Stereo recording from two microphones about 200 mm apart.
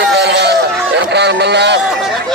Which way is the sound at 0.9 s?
60° right (ahead or behind).